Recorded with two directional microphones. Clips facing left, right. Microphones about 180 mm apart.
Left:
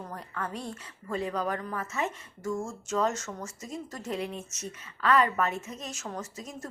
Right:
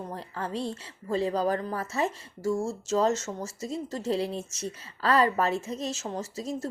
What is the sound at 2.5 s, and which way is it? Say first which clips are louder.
Speech: right 3 dB; 5° right (ahead or behind).